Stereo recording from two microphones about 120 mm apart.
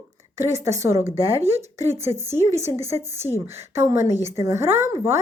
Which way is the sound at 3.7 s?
25° right (ahead or behind).